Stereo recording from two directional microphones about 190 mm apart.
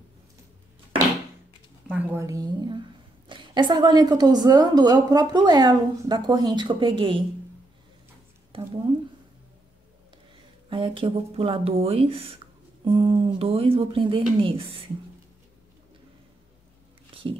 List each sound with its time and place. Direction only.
1.9 s a woman's voice: 10° right (ahead or behind); by 7.2 s 25° right (ahead or behind)
10.7 s a woman's voice: 25° right (ahead or behind)
17.1 s a sound: 30° right (ahead or behind)